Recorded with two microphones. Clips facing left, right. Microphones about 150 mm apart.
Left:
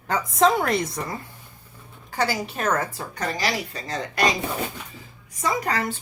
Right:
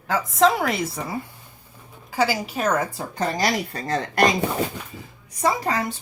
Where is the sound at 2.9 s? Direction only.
25° right (ahead or behind).